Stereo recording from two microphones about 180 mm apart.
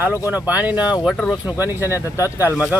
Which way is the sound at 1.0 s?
5° left (ahead or behind).